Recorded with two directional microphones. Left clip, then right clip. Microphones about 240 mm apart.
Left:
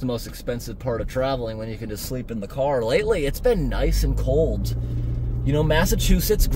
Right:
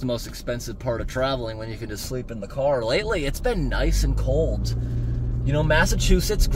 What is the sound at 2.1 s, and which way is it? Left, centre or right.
Speech, left.